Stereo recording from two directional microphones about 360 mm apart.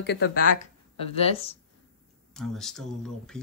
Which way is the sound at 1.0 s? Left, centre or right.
Centre.